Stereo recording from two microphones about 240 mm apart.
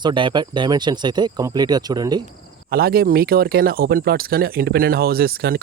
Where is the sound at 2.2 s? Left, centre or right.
Right.